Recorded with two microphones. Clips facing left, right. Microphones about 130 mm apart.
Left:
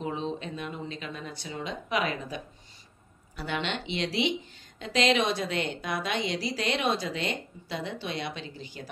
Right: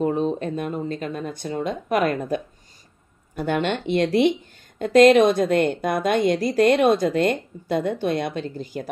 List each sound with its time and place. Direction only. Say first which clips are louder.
0.0 s a woman's voice: right 10 dB; 50° right (ahead or behind)